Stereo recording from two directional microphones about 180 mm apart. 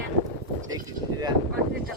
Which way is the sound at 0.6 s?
20° right (ahead or behind).